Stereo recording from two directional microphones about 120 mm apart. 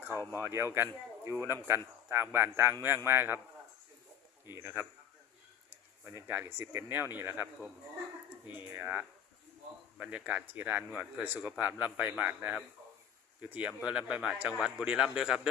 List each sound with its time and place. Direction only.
0.1 s speech: 25° left (ahead or behind)
0.4 s speech: 20° right (ahead or behind)
4.5 s speech: 20° right (ahead or behind)
6.1 s speech: 20° right (ahead or behind)
8.7 s speech: 15° right (ahead or behind)